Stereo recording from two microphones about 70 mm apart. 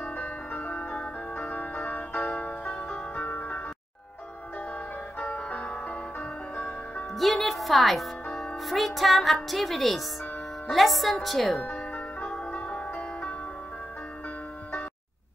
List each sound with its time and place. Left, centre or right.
0.0 s music: left
5.2 s music: centre
7.2 s speech: centre
11.9 s music: centre